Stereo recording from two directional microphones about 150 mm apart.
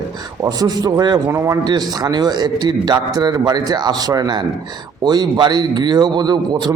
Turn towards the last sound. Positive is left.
turn(degrees=-30)  # may be behind; listen again after turning